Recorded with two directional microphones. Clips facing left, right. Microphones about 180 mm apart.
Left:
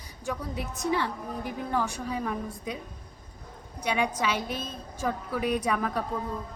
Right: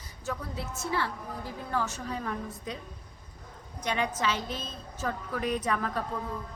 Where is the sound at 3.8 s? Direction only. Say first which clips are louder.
Left 3 dB; 10° left (ahead or behind).